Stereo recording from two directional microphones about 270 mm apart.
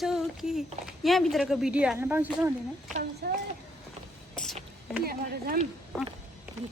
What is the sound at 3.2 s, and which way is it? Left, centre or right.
Speech, right.